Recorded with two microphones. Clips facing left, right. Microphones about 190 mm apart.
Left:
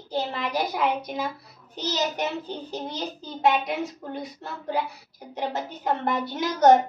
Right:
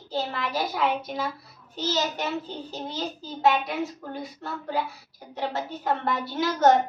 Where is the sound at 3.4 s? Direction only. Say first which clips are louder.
Even; 20° left (ahead or behind).